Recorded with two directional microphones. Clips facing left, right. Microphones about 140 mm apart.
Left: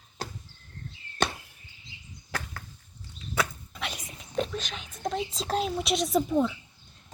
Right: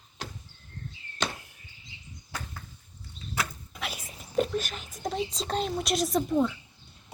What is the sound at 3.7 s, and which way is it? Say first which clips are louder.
Speech: left 1 dB; 5° right (ahead or behind).